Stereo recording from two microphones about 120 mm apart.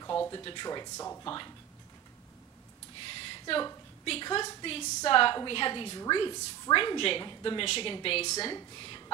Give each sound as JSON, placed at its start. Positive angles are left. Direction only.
{"t": 0.3, "sound": "speech", "side_deg": 40}
{"t": 1.2, "sound": "speech", "side_deg": 40}
{"t": 3.1, "sound": "a sound", "side_deg": 50}
{"t": 4.0, "sound": "a woman's voice", "side_deg": 45}
{"t": 8.5, "sound": "a woman's voice", "side_deg": 40}